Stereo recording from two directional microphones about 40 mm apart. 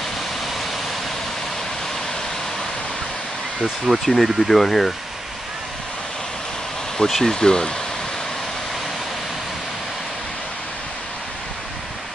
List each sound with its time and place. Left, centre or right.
3.9 s speech: centre
7.0 s speech: centre